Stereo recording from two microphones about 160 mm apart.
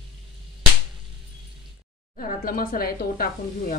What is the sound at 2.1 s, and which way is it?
Speech, 60° left (ahead or behind).